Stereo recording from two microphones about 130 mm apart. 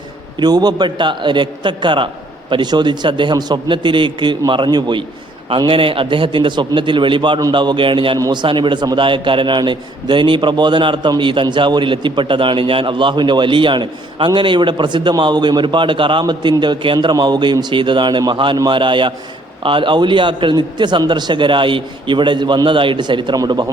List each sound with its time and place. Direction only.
0.3 s a man's voice: 30° right (ahead or behind)